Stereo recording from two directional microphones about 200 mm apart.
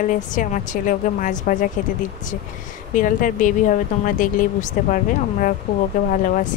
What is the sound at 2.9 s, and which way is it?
Speech, 40° left (ahead or behind).